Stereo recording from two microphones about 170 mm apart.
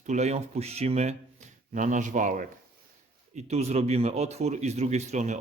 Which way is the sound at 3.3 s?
40° right (ahead or behind).